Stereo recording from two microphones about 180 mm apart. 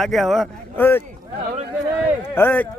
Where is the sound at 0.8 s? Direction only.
10° left (ahead or behind).